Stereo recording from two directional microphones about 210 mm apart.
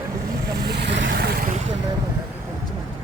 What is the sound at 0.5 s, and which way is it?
Vehicle, 50° right (ahead or behind).